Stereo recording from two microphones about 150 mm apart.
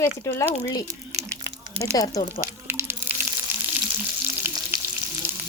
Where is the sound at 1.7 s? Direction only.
40° right (ahead or behind).